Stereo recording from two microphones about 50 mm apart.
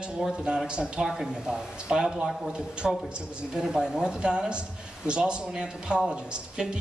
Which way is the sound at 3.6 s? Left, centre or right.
Centre.